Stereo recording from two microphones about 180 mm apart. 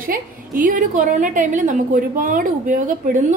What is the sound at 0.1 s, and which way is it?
A woman's voice, 45° right (ahead or behind).